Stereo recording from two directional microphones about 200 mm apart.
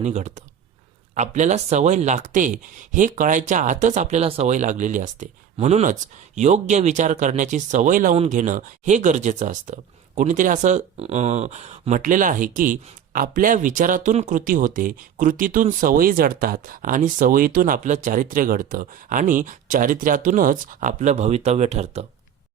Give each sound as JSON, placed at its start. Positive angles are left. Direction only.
{"t": 0.0, "sound": "speech", "side_deg": -35}